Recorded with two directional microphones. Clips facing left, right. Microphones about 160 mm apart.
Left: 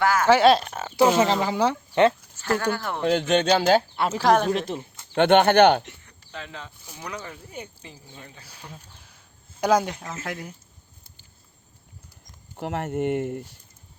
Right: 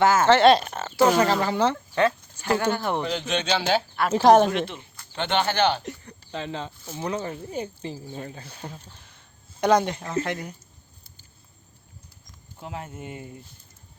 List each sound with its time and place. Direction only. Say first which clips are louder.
0.0 s speech: right 3 dB; 25° right (ahead or behind)
0.3 s speech: left 2 dB; 5° left (ahead or behind)
2.4 s speech: right 1 dB; 15° right (ahead or behind)
3.0 s speech: left 6 dB; 50° left (ahead or behind)
4.1 s speech: right 5 dB; 25° right (ahead or behind)
4.5 s speech: left 1 dB; 40° left (ahead or behind)
5.1 s speech: left 8 dB; 60° left (ahead or behind)
5.8 s speech: right 10 dB; 40° right (ahead or behind)
8.9 s a sound: right 2 dB; 5° left (ahead or behind)
10.2 s speech: right 3 dB; 5° left (ahead or behind)
12.5 s speech: left 9 dB; 70° left (ahead or behind)